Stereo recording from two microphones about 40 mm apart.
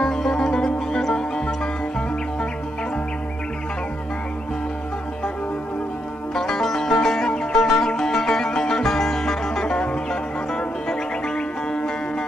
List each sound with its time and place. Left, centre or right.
0.0 s music: centre
6.3 s music: centre